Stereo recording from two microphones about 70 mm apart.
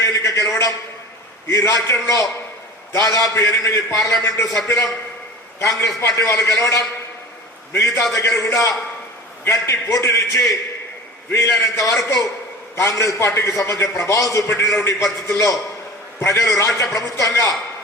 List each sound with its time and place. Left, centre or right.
0.0 s a sound: left
1.5 s a man's voice: left
3.3 s a man's voice: left